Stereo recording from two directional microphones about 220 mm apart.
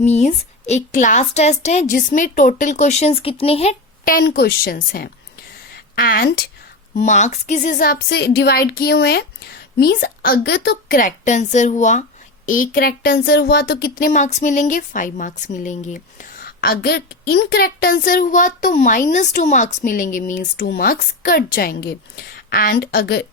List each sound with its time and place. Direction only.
0.0 s a woman's voice: 30° left (ahead or behind); by 23.2 s 45° left (ahead or behind)